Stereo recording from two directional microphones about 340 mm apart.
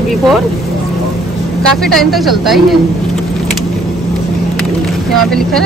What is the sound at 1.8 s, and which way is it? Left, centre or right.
Speech, centre.